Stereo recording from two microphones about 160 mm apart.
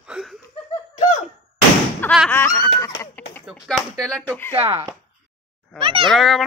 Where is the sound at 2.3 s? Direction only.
15° left (ahead or behind).